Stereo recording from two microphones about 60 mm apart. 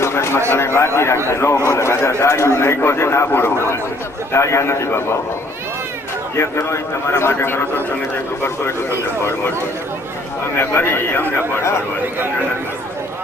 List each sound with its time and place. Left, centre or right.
0.0 s a sound: left
0.5 s a man's voice: left
6.3 s a man's voice: left
10.6 s a man's voice: left